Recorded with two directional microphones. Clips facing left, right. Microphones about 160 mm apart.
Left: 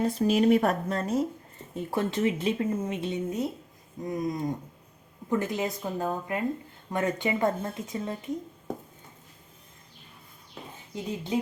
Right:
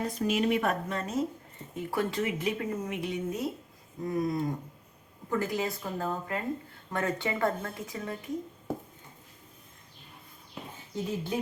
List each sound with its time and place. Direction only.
0.0 s speech: 30° left (ahead or behind)
1.7 s speech: 25° left (ahead or behind)
10.9 s speech: 20° left (ahead or behind)